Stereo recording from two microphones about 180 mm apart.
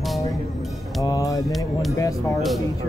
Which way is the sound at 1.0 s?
20° left (ahead or behind).